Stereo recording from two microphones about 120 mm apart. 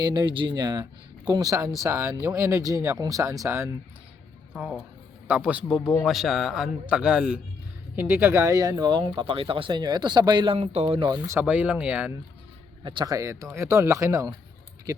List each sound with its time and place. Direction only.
0.0 s speech: 35° right (ahead or behind)
4.5 s speech: 5° right (ahead or behind)
7.9 s speech: 15° right (ahead or behind); by 10.5 s 35° right (ahead or behind)
10.5 s speech: 60° right (ahead or behind)
11.3 s speech: 15° right (ahead or behind)
12.8 s speech: 40° right (ahead or behind)
13.1 s speech: 25° right (ahead or behind)